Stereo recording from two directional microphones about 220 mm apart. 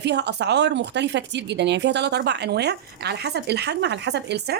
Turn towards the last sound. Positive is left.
turn(degrees=-50)  # may be behind; listen again after turning